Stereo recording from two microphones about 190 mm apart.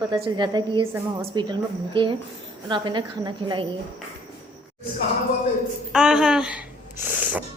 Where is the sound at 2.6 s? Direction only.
25° right (ahead or behind).